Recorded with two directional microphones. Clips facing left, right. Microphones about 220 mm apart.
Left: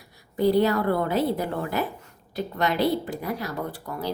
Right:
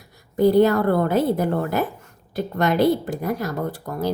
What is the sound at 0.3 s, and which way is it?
Speech, 50° right (ahead or behind).